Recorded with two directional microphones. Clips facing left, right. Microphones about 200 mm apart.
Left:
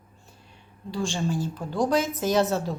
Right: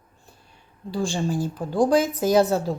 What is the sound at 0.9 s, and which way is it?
A woman's voice, 35° right (ahead or behind).